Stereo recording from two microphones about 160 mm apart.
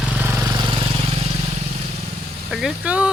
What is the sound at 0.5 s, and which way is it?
Vehicle, 30° right (ahead or behind).